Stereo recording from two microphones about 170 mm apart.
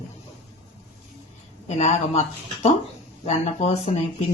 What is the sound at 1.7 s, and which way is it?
Speech, 40° left (ahead or behind).